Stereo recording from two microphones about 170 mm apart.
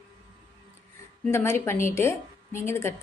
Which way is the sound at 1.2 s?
15° left (ahead or behind).